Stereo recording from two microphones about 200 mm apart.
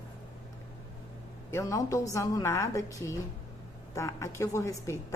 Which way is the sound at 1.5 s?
15° left (ahead or behind).